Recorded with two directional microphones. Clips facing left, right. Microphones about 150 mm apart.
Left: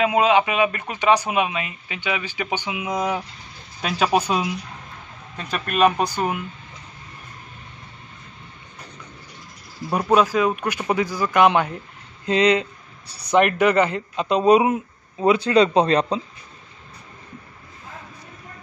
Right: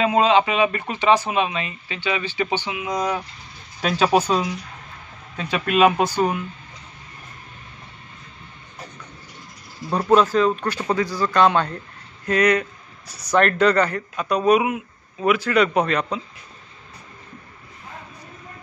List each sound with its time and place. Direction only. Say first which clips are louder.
0.0 s speech: even; 10° left (ahead or behind)
5.5 s speech: right 2 dB; 5° right (ahead or behind)
9.8 s speech: right 1 dB; 10° left (ahead or behind); by 16.2 s 30° left (ahead or behind)